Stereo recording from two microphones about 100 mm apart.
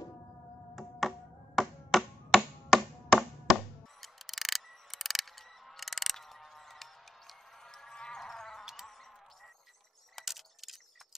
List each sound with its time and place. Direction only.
0.7 s finger snapping: centre (ahead or behind)
10.1 s keys jangling: centre (ahead or behind)